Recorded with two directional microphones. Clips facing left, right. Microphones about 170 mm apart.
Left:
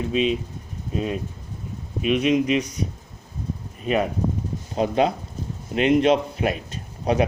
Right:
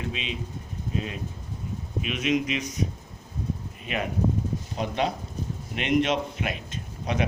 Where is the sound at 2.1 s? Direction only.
35° left (ahead or behind).